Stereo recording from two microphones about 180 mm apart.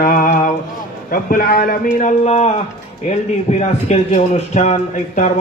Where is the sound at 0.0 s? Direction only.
50° left (ahead or behind).